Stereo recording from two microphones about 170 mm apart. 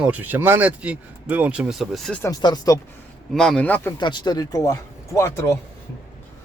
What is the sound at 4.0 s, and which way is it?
Speech, 25° left (ahead or behind).